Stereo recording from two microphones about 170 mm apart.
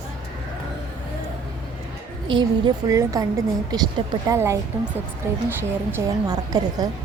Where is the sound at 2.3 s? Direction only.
25° right (ahead or behind).